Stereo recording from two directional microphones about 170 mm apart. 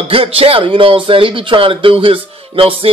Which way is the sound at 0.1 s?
35° right (ahead or behind).